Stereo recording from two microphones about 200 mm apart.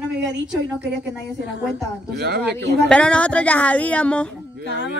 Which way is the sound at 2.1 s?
55° right (ahead or behind).